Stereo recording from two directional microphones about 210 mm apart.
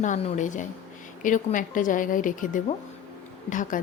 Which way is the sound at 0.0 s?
30° left (ahead or behind).